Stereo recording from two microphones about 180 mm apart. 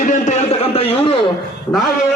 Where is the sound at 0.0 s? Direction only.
40° left (ahead or behind).